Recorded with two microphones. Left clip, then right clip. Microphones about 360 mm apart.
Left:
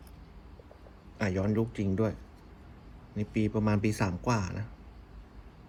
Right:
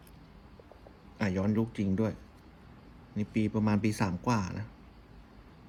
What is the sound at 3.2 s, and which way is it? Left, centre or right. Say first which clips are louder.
Speech: left 1 dB; centre.